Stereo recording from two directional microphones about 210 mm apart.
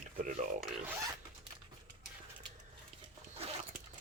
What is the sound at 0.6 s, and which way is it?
Speech, centre (ahead or behind).